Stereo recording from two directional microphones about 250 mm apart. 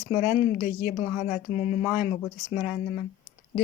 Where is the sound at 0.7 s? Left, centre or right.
Left.